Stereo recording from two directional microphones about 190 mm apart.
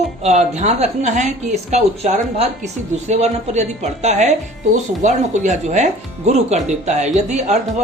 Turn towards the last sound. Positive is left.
turn(degrees=-40)  # may be behind; listen again after turning